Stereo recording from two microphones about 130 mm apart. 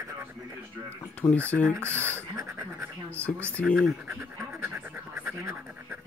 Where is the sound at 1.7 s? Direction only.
15° right (ahead or behind).